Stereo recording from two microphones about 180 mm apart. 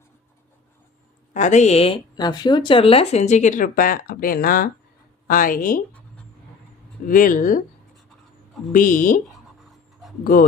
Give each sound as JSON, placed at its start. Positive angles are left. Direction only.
{"t": 1.3, "sound": "a woman's voice", "side_deg": 40}
{"t": 7.1, "sound": "speech", "side_deg": 50}
{"t": 8.7, "sound": "speech", "side_deg": 45}
{"t": 10.3, "sound": "speech", "side_deg": 50}